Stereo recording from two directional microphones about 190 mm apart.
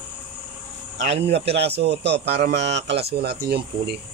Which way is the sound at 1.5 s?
60° right (ahead or behind).